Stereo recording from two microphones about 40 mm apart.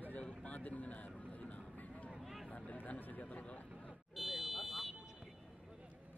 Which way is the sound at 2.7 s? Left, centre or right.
Left.